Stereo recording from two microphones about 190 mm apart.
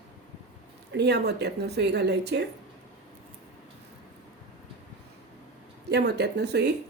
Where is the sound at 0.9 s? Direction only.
60° right (ahead or behind).